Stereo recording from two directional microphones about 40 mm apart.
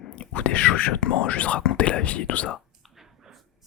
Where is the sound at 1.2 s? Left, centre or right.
Left.